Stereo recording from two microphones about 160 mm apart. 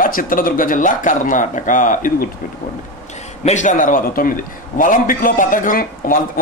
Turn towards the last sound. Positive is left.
turn(degrees=60)  # may be behind; listen again after turning